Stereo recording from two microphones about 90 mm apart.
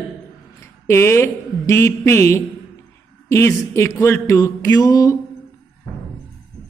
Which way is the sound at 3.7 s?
30° left (ahead or behind).